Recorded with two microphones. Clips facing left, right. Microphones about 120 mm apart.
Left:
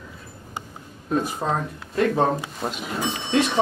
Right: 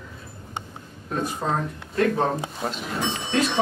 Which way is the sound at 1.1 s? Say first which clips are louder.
Left 2 dB; 5° left (ahead or behind).